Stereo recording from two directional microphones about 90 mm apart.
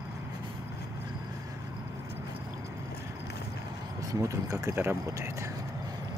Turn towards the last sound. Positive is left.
turn(degrees=-35)  # may be behind; listen again after turning